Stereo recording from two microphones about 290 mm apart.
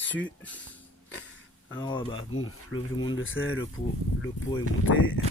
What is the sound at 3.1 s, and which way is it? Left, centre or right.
Speech, left.